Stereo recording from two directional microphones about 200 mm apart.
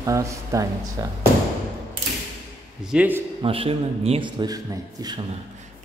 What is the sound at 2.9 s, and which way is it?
Speech, 10° right (ahead or behind).